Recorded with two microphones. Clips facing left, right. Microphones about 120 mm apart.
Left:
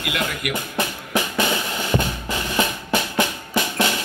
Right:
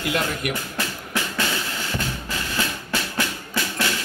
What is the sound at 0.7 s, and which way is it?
Drum, 20° left (ahead or behind).